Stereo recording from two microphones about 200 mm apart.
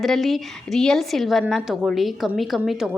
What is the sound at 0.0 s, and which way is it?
A woman's voice, centre (ahead or behind).